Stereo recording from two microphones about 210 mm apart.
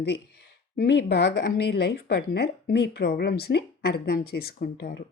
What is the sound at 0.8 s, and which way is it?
Speech, 50° left (ahead or behind).